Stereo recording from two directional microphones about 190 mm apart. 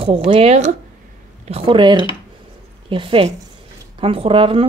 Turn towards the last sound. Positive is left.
turn(degrees=-30)  # may be behind; listen again after turning